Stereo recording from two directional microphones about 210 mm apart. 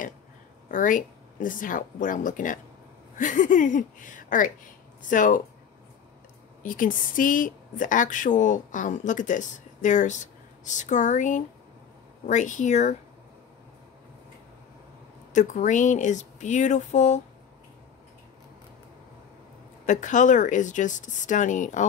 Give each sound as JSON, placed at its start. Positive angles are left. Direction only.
{"t": 0.7, "sound": "speech", "side_deg": 40}
{"t": 6.6, "sound": "speech", "side_deg": 40}
{"t": 15.3, "sound": "speech", "side_deg": 35}
{"t": 19.9, "sound": "speech", "side_deg": 35}